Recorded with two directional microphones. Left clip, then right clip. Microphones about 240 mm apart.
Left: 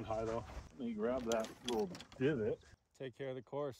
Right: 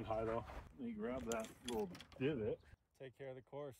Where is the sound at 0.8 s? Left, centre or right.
Left.